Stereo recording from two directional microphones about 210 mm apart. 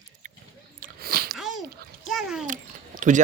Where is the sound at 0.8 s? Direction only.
45° right (ahead or behind).